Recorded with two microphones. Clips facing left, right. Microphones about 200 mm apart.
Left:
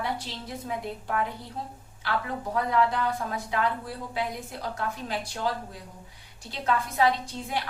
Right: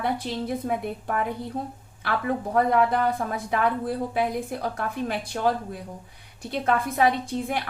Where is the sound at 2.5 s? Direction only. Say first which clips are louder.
Right 4 dB; 55° right (ahead or behind).